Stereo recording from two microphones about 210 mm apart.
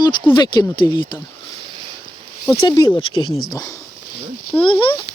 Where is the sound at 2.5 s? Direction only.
20° left (ahead or behind).